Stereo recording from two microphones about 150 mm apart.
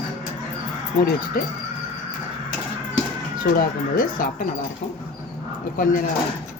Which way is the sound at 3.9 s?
70° left (ahead or behind).